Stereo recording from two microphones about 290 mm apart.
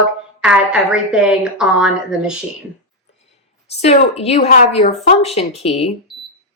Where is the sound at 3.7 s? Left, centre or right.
Left.